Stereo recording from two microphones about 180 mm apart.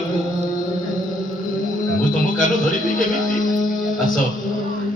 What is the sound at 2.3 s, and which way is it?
A man's voice, 50° left (ahead or behind).